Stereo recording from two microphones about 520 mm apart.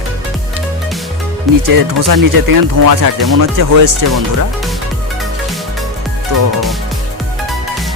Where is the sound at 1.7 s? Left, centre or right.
Right.